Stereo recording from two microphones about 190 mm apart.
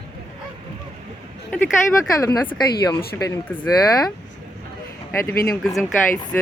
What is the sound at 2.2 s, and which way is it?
Speech, 20° left (ahead or behind).